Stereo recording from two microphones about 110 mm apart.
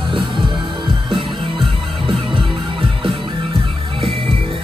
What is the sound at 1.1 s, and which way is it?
Music, 50° right (ahead or behind).